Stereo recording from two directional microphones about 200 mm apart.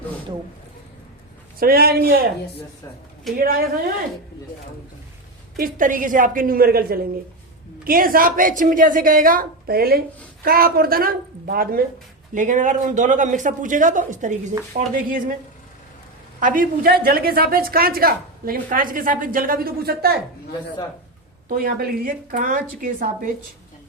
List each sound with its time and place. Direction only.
1.5 s a woman's voice: 50° right (ahead or behind)
3.3 s a woman's voice: 50° right (ahead or behind)
5.5 s a woman's voice: 45° right (ahead or behind)
16.4 s a woman's voice: 45° right (ahead or behind)
21.5 s a woman's voice: 45° right (ahead or behind)